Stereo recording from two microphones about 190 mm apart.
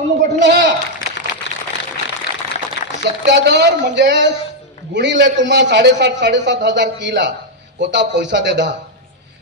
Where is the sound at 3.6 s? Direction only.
70° right (ahead or behind).